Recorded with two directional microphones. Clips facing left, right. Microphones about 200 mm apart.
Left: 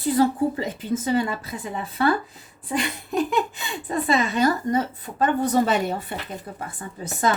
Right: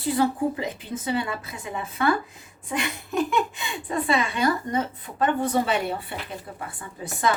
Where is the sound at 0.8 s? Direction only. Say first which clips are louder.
Left 5 dB; 40° left (ahead or behind).